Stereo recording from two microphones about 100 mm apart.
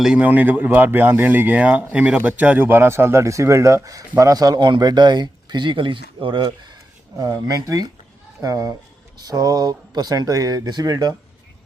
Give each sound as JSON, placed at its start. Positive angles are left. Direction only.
{"t": 0.0, "sound": "a man's voice", "side_deg": -10}
{"t": 7.2, "sound": "speech", "side_deg": -40}